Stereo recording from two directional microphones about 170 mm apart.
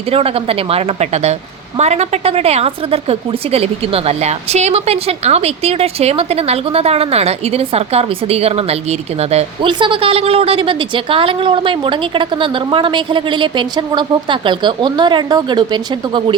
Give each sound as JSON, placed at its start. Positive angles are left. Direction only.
{"t": 0.1, "sound": "a woman's voice", "side_deg": -35}